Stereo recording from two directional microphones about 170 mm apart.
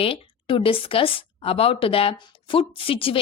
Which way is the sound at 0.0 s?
30° left (ahead or behind).